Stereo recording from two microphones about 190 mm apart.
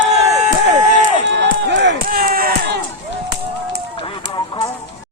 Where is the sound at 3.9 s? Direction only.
30° left (ahead or behind).